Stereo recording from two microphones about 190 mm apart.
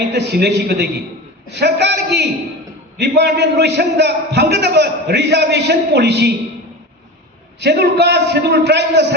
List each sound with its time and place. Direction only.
0.1 s a man's voice: 60° right (ahead or behind)
7.6 s a man's voice: 60° right (ahead or behind)